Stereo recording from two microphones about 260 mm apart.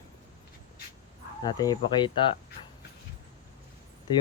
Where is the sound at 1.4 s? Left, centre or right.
Centre.